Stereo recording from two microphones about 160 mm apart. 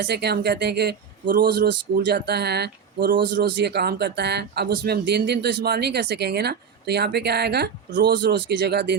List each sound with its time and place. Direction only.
0.0 s speech: 90° right
3.2 s speech: 90° right